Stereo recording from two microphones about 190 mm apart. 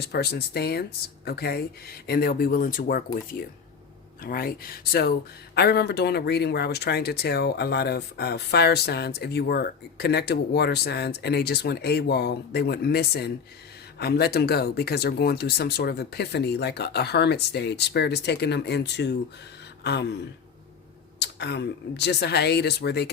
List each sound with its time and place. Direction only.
0.0 s speech: 55° left (ahead or behind)
4.2 s speech: 50° left (ahead or behind)
21.2 s speech: 65° left (ahead or behind)